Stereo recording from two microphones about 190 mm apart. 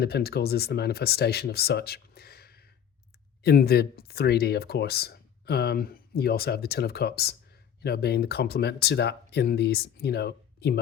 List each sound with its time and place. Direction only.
0.0 s speech: 55° left (ahead or behind)